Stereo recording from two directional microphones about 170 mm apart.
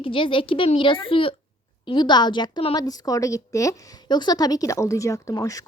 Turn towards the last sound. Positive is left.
turn(degrees=20)  # may be behind; listen again after turning